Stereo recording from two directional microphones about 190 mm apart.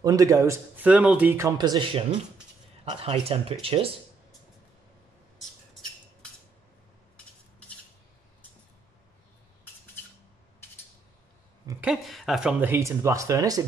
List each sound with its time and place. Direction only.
0.0 s speech: 20° right (ahead or behind)
11.8 s speech: centre (ahead or behind); by 13.7 s 15° right (ahead or behind)